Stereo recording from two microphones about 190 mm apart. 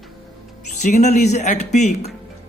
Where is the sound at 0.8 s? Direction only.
40° left (ahead or behind).